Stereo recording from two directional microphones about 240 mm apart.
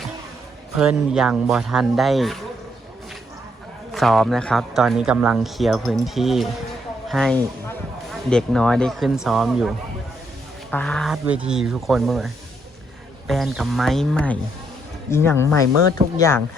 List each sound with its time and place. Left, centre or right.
0.8 s a man's voice: centre
3.9 s a man's voice: centre